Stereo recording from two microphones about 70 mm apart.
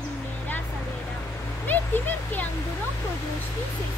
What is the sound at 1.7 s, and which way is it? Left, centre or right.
Speech, left.